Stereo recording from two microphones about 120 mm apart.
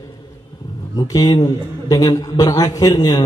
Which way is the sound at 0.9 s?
30° left (ahead or behind).